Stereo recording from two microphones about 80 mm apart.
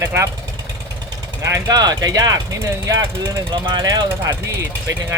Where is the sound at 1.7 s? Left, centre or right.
Right.